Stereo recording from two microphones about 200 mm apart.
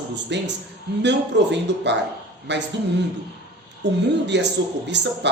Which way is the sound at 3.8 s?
60° right (ahead or behind).